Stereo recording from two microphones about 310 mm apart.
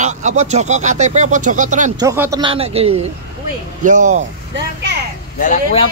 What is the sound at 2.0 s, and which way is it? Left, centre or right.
Speech, centre.